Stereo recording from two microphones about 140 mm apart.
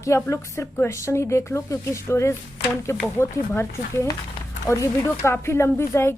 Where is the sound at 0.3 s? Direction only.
20° left (ahead or behind).